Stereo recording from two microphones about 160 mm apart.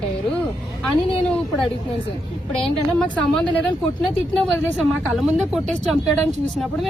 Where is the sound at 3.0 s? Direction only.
5° left (ahead or behind).